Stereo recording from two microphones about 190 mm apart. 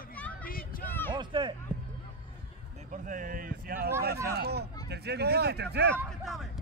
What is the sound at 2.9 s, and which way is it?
Speech, 45° right (ahead or behind).